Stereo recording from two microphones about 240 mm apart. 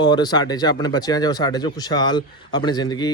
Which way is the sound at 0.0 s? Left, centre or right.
Centre.